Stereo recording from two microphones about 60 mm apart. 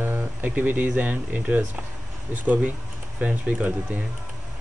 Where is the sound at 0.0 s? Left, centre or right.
Right.